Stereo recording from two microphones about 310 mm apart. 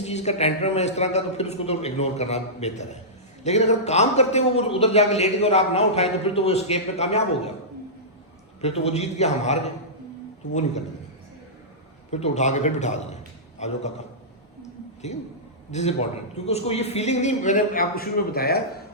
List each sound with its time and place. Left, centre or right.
0.0 s a man's voice: left
8.6 s a man's voice: centre
12.1 s a man's voice: left
15.7 s a man's voice: left